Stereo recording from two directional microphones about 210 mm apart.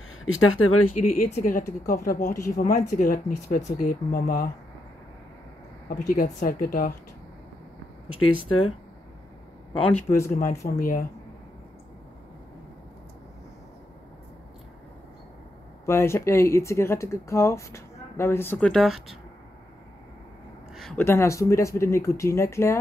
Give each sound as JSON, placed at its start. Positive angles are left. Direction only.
{"t": 0.2, "sound": "speech", "side_deg": 75}
{"t": 1.3, "sound": "speech", "side_deg": 40}
{"t": 5.9, "sound": "speech", "side_deg": 40}
{"t": 8.2, "sound": "speech", "side_deg": 90}
{"t": 10.0, "sound": "speech", "side_deg": 15}
{"t": 10.3, "sound": "speech", "side_deg": 40}
{"t": 15.8, "sound": "speech", "side_deg": 10}
{"t": 20.7, "sound": "speech", "side_deg": 5}